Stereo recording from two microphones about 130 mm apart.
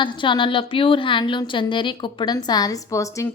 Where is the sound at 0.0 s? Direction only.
40° left (ahead or behind).